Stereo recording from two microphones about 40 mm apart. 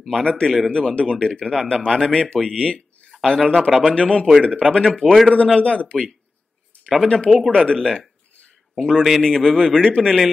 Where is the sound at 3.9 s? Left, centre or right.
Left.